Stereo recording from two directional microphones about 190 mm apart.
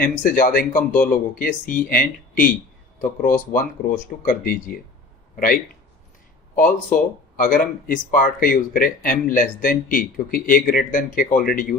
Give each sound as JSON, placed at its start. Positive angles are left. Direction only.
{"t": 0.0, "sound": "speech", "side_deg": 45}
{"t": 6.6, "sound": "speech", "side_deg": 45}